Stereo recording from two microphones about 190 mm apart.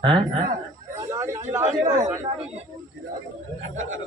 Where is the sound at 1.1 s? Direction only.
15° right (ahead or behind).